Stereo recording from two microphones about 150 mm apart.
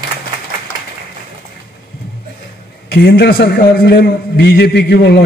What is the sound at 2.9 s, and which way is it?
A man's voice, 90° left.